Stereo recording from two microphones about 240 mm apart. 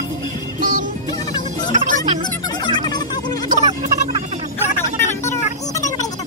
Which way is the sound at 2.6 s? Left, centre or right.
Centre.